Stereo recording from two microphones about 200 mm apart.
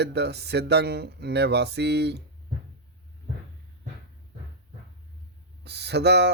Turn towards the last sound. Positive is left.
turn(degrees=-55)  # may be behind; listen again after turning